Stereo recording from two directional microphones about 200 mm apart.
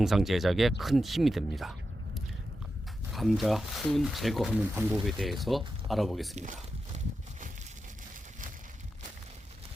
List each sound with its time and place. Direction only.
0.0 s speech: centre (ahead or behind)
3.1 s speech: centre (ahead or behind)
6.3 s a sound: 35° right (ahead or behind)